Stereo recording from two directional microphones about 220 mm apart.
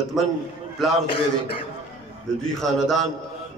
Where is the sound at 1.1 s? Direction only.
25° left (ahead or behind).